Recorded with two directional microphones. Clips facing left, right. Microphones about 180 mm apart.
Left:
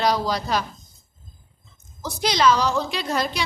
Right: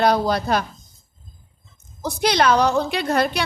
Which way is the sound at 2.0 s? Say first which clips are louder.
Right 3 dB; 60° right (ahead or behind).